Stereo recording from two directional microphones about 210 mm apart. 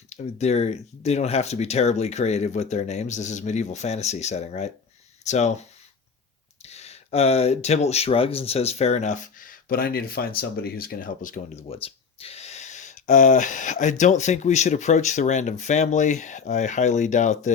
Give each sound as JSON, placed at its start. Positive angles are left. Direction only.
{"t": 0.1, "sound": "speech", "side_deg": 30}